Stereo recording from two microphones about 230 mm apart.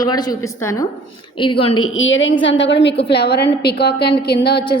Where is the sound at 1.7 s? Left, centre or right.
Left.